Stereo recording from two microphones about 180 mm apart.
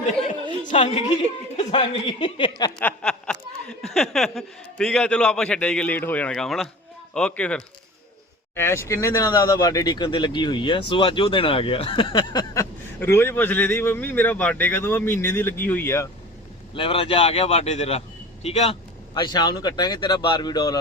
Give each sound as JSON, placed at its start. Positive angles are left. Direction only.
{"t": 0.7, "sound": "speech", "side_deg": 40}
{"t": 2.7, "sound": "snicker", "side_deg": 5}
{"t": 8.5, "sound": "a man's voice", "side_deg": 15}
{"t": 16.7, "sound": "speech", "side_deg": 30}
{"t": 19.1, "sound": "speech", "side_deg": 25}